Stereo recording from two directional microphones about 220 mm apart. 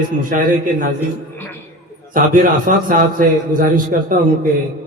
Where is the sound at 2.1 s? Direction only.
35° right (ahead or behind).